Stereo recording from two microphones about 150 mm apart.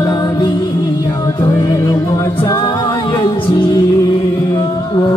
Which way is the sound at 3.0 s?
30° left (ahead or behind).